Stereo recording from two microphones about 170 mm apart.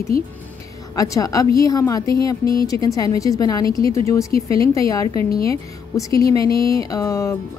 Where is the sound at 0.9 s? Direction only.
20° left (ahead or behind).